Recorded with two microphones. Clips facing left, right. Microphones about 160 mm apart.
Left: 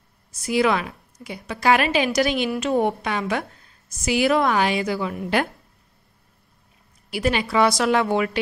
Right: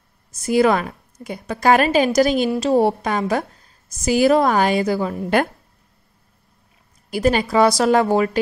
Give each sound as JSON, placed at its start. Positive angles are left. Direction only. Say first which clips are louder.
{"t": 0.3, "sound": "a woman's voice", "louder": "right 4 dB", "side_deg": -45}
{"t": 2.5, "sound": "a woman's voice", "louder": "right 4 dB", "side_deg": -30}
{"t": 7.1, "sound": "a woman's voice", "louder": "right 5 dB", "side_deg": -45}